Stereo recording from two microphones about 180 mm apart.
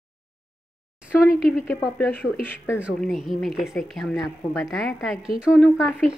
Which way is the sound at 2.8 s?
Centre (ahead or behind).